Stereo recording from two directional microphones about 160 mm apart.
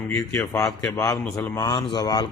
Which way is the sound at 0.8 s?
20° left (ahead or behind).